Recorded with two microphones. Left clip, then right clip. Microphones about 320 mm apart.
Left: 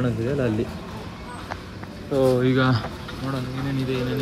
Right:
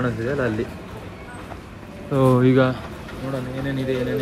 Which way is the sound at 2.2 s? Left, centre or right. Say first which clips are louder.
Right 2 dB; right.